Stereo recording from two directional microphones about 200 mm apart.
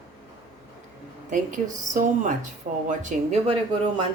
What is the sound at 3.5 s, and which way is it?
Speech, 25° right (ahead or behind).